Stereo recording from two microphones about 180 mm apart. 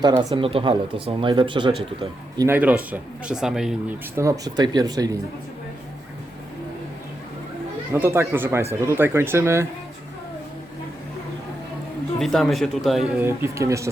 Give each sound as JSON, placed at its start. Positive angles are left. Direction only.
{"t": 0.0, "sound": "speech", "side_deg": -25}
{"t": 2.9, "sound": "speech", "side_deg": -5}
{"t": 4.2, "sound": "speech", "side_deg": -20}
{"t": 7.9, "sound": "speech", "side_deg": -15}
{"t": 12.2, "sound": "speech", "side_deg": 0}